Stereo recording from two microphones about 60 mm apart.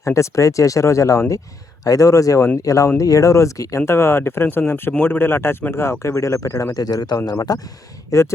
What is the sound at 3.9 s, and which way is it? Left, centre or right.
Speech, left.